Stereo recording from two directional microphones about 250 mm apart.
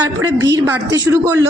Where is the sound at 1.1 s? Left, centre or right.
Centre.